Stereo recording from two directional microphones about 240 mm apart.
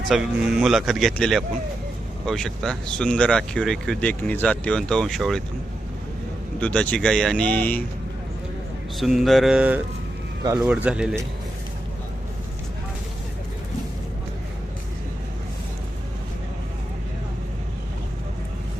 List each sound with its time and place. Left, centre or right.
0.1 s speech: centre
6.6 s speech: centre
9.0 s speech: centre